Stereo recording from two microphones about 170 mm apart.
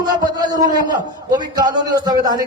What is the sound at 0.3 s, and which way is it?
Speech, 20° right (ahead or behind).